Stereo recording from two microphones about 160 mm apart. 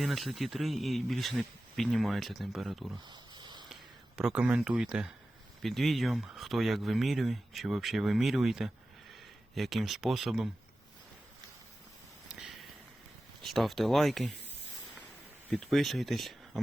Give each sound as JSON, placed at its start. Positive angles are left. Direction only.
{"t": 0.0, "sound": "speech", "side_deg": 0}
{"t": 3.1, "sound": "a sound", "side_deg": -30}
{"t": 4.2, "sound": "speech", "side_deg": -5}
{"t": 12.3, "sound": "a sound", "side_deg": 0}
{"t": 13.4, "sound": "speech", "side_deg": 0}
{"t": 15.5, "sound": "speech", "side_deg": 0}